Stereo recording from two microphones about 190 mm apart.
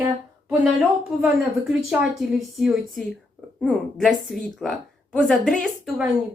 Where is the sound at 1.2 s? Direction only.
Centre (ahead or behind).